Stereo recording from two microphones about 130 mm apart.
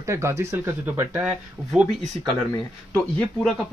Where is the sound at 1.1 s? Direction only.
10° right (ahead or behind).